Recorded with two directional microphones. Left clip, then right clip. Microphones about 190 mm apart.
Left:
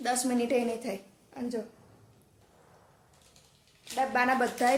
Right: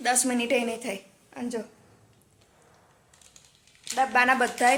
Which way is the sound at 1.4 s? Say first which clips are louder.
Right 2 dB; 20° right (ahead or behind).